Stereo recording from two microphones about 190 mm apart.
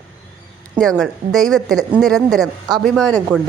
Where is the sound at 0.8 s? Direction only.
Centre (ahead or behind).